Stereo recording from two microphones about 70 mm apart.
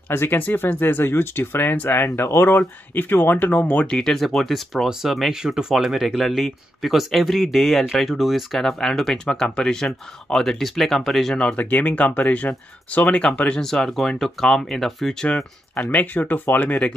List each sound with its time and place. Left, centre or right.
0.1 s speech: left
4.0 s speech: centre
15.2 s speech: centre